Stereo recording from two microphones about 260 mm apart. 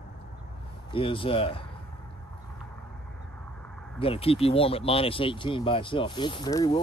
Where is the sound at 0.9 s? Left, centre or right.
Centre.